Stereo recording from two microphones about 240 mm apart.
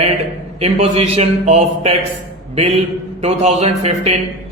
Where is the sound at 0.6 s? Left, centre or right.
Right.